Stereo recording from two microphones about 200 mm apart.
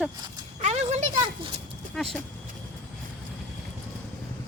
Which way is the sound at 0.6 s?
35° right (ahead or behind).